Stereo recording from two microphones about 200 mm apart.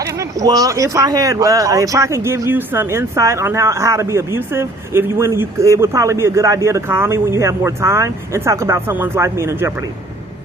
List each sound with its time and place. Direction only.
0.0 s speech: 15° right (ahead or behind)